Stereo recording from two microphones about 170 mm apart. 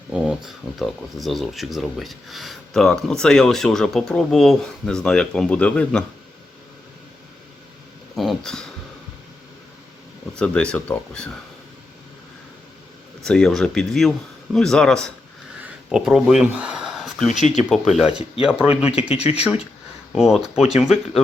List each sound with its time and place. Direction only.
0.1 s speech: centre (ahead or behind)
8.1 s a sound: centre (ahead or behind)
10.3 s speech: 5° left (ahead or behind)
13.2 s speech: 5° left (ahead or behind)
15.6 s a sound: 5° right (ahead or behind)
17.2 s speech: 45° left (ahead or behind)
17.7 s speech: centre (ahead or behind)
19.1 s speech: 40° left (ahead or behind)
20.1 s speech: centre (ahead or behind)